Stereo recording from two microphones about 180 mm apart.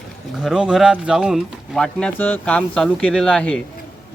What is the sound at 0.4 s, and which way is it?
Speech, 5° right (ahead or behind).